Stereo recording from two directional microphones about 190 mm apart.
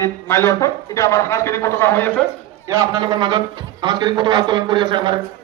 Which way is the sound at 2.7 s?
20° right (ahead or behind).